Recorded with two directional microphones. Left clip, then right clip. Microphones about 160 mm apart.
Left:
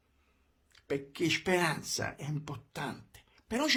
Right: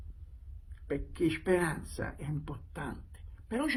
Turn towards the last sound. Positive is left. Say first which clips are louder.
# left 3 dB
turn(degrees=35)  # may be behind; listen again after turning